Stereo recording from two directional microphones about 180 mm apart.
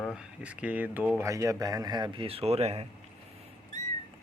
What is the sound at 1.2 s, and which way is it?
Speech, 15° right (ahead or behind).